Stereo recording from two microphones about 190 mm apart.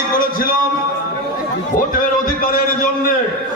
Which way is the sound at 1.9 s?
50° left (ahead or behind).